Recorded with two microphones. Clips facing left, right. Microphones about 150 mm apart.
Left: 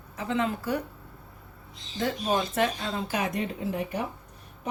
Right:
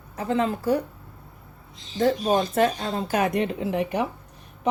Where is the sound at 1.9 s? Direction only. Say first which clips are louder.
Right 6 dB; 40° right (ahead or behind); by 4.1 s 90° right.